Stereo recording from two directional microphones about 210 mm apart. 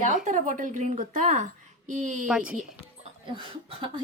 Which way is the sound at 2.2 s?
5° right (ahead or behind).